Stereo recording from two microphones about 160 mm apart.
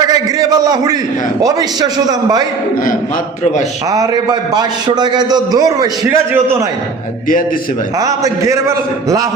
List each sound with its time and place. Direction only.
0.0 s a sound: 25° right (ahead or behind)
1.4 s a man's voice: 25° right (ahead or behind)
3.8 s a man's voice: 20° right (ahead or behind)
6.1 s a man's voice: 15° right (ahead or behind)
7.9 s a man's voice: 20° right (ahead or behind)